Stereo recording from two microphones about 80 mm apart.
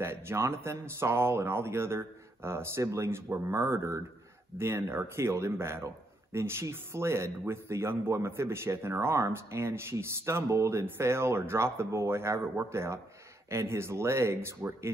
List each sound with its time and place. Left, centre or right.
0.0 s a man's voice: right